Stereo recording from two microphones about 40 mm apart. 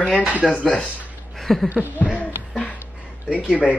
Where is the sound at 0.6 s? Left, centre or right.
Left.